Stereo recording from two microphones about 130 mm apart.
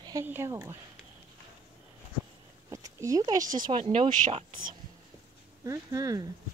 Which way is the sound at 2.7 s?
25° right (ahead or behind).